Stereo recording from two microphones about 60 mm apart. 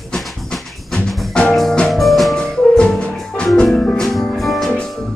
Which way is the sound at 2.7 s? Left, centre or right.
Centre.